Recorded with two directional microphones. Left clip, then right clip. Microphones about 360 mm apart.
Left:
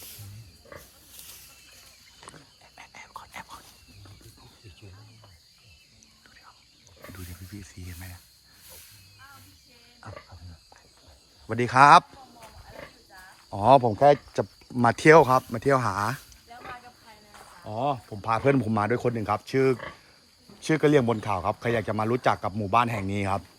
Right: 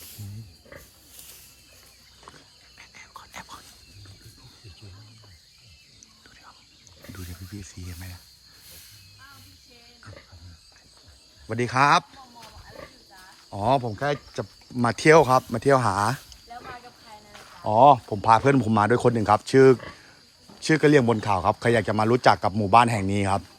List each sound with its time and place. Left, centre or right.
0.0 s music: centre
2.7 s whispering: centre
7.2 s a sound: centre
11.4 s a sound: centre
13.5 s speech: centre
17.7 s speech: centre